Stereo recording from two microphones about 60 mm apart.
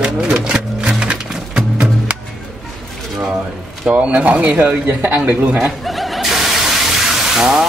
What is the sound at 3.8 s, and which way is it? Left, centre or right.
Speech, right.